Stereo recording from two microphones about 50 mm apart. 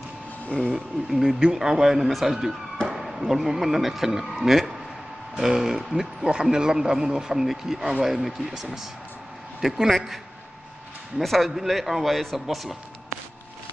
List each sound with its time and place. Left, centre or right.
0.7 s speech: centre
2.9 s a sound: centre
3.3 s a man's voice: centre
11.1 s a man's voice: centre